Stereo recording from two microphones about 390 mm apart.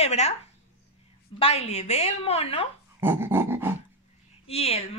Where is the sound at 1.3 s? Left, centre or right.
Centre.